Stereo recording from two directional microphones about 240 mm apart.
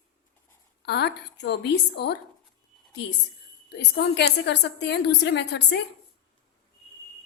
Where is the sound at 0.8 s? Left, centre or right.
Left.